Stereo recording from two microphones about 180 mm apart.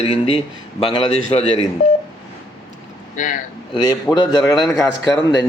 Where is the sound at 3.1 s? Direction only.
45° left (ahead or behind).